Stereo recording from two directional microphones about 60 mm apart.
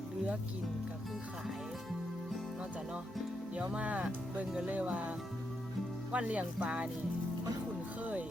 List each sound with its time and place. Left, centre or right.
3.5 s speech: right